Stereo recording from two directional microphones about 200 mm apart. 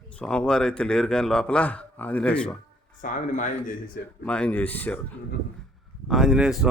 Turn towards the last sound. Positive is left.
turn(degrees=0)  # may be behind; listen again after turning